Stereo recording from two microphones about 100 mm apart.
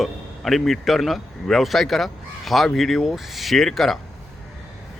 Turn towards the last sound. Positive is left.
turn(degrees=0)  # may be behind; listen again after turning